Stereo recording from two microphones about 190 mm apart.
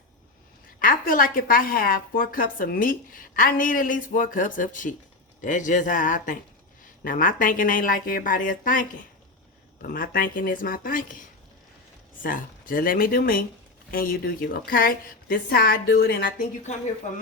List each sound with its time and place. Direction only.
0.8 s a woman's voice: 45° left (ahead or behind)
12.2 s a woman's voice: 45° left (ahead or behind)